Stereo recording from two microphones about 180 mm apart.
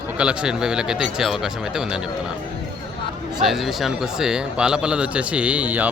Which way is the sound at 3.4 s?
Centre (ahead or behind).